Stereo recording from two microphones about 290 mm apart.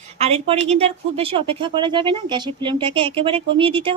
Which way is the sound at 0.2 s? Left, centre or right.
Right.